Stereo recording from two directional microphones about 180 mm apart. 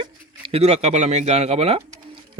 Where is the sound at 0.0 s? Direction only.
30° right (ahead or behind).